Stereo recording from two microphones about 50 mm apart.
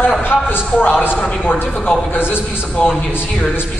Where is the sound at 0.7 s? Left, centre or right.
Left.